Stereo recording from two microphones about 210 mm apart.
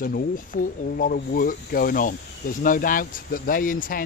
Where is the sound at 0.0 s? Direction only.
40° left (ahead or behind).